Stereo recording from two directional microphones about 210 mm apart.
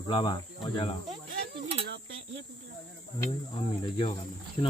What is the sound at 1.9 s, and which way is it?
Cricket, 65° right (ahead or behind).